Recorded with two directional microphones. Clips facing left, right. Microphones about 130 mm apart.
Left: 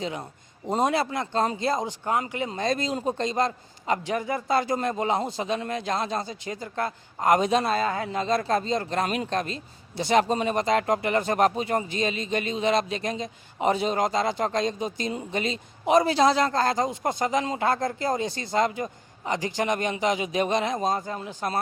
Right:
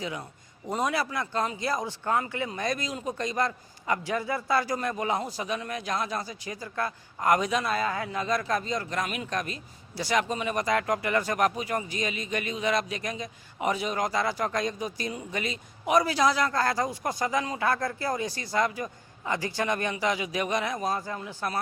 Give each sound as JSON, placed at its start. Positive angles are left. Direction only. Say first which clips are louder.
{"t": 0.0, "sound": "a man's voice", "louder": "left 3 dB", "side_deg": 25}